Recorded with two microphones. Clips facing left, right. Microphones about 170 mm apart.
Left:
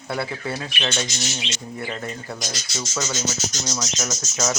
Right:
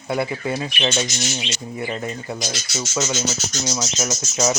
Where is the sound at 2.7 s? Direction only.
20° right (ahead or behind).